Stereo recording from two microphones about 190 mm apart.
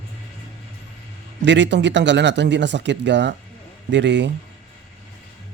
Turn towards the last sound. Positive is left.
turn(degrees=-70)  # may be behind; listen again after turning